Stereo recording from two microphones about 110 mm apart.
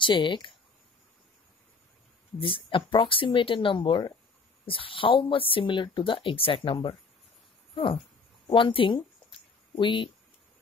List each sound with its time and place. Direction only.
0.0 s speech: 45° left (ahead or behind)
2.4 s speech: 50° left (ahead or behind)
8.5 s speech: 50° left (ahead or behind)